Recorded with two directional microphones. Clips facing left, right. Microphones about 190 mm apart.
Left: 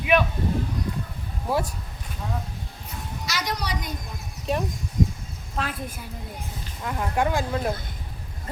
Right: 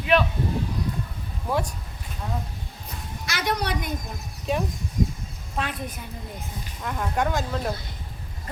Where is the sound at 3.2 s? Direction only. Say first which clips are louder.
Right 3 dB; 55° right (ahead or behind).